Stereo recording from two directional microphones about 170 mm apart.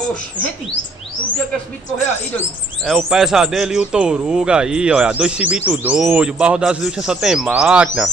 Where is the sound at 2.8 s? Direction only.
Centre (ahead or behind).